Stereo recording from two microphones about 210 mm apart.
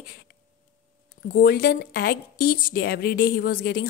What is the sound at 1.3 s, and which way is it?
A woman's voice, 45° left (ahead or behind).